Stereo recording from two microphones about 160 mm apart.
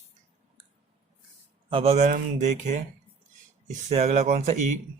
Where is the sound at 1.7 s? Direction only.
40° right (ahead or behind).